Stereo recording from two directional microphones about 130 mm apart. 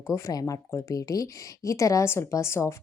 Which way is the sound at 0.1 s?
25° left (ahead or behind).